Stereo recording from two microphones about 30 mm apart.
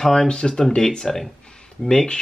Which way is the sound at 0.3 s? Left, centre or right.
Left.